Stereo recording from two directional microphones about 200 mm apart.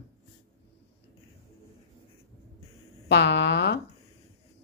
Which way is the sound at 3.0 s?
60° left (ahead or behind).